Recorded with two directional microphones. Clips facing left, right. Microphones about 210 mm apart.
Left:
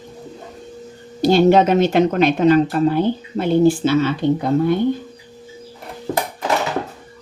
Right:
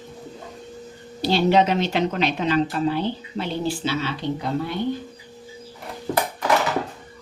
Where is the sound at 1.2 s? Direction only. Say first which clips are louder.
Left 6 dB; 50° left (ahead or behind).